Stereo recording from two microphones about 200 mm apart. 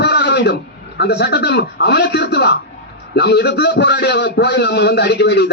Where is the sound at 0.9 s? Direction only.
55° left (ahead or behind).